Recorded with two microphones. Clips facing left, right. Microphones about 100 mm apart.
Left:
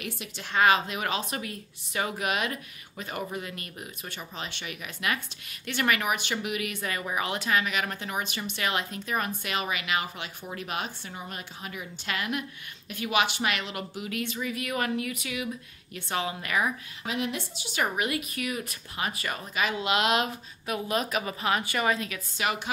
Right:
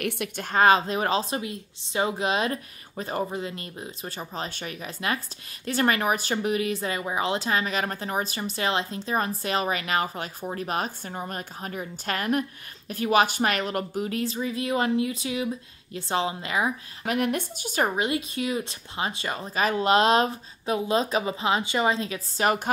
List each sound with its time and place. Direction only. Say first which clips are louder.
0.0 s a woman's voice: right 8 dB; 60° right (ahead or behind)
0.5 s speech: right 3 dB; 35° right (ahead or behind)
17.0 s a woman's voice: right 6 dB; 55° right (ahead or behind)
17.8 s speech: right 2 dB; 25° right (ahead or behind)